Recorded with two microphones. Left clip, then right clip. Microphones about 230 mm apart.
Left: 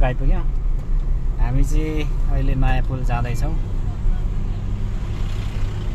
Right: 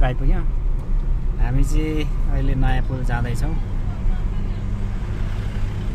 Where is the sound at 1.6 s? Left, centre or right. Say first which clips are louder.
Right 1 dB; centre.